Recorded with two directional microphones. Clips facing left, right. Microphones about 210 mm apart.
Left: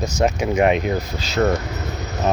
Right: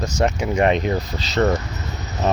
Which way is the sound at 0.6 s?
5° left (ahead or behind).